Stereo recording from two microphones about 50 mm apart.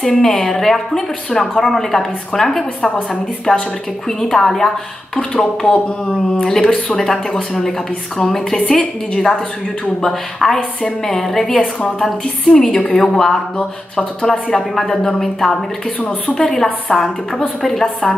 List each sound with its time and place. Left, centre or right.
0.0 s a woman's voice: centre
11.5 s a woman's voice: left
12.0 s a woman's voice: centre